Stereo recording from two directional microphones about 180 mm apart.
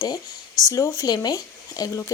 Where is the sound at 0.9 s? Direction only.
20° left (ahead or behind).